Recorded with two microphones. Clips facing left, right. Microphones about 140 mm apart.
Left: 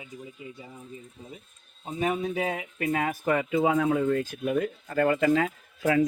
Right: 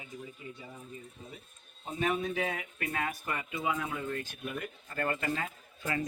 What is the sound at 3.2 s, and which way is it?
Speech, 70° left (ahead or behind).